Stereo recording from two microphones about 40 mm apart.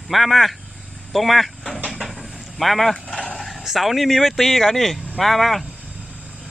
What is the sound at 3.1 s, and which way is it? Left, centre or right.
Dog, left.